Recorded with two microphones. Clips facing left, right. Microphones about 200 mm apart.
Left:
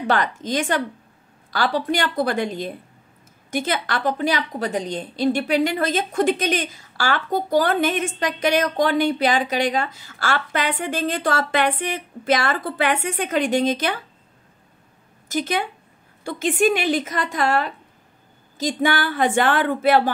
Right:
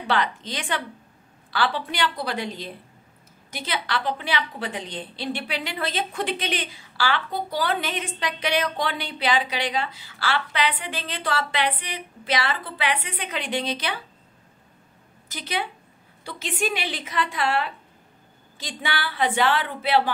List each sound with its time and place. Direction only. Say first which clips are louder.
0.0 s a woman's voice: left 3 dB; 45° left (ahead or behind)
15.2 s a woman's voice: left 7 dB; 45° left (ahead or behind)